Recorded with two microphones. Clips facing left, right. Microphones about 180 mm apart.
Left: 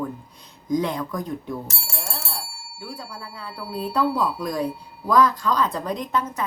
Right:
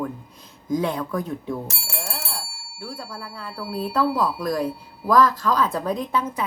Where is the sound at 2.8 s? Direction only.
5° right (ahead or behind).